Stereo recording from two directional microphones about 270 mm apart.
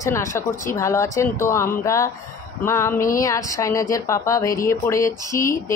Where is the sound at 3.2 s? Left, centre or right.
Centre.